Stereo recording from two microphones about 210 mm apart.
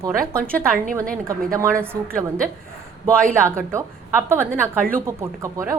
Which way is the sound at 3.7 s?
10° right (ahead or behind).